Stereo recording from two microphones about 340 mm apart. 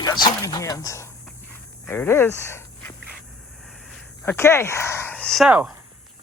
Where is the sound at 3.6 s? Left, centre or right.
Centre.